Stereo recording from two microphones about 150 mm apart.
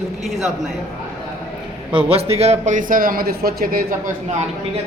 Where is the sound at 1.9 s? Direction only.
40° right (ahead or behind); by 3.8 s 80° right.